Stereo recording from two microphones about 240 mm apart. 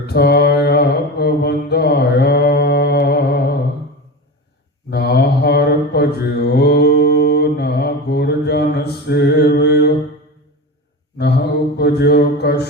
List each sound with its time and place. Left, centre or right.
0.0 s mantra: left
4.9 s mantra: left
11.2 s mantra: left